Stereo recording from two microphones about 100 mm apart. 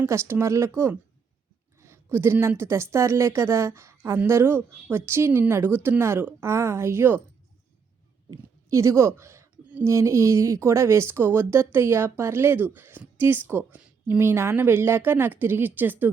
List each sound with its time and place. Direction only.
0.0 s speech: 25° right (ahead or behind)
8.7 s speech: 30° right (ahead or behind)